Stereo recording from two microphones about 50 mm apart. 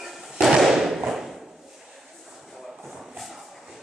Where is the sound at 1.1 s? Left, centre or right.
Centre.